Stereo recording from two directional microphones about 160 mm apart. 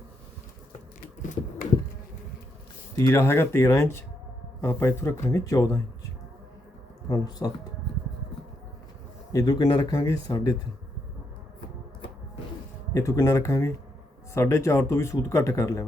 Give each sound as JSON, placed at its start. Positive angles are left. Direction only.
{"t": 2.9, "sound": "speech", "side_deg": 15}
{"t": 7.1, "sound": "speech", "side_deg": 25}
{"t": 9.3, "sound": "speech", "side_deg": 20}
{"t": 12.9, "sound": "speech", "side_deg": 20}